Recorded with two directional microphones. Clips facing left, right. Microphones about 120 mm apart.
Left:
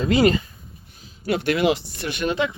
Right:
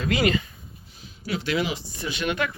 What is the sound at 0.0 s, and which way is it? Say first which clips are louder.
Speech: left 6 dB; 35° left (ahead or behind).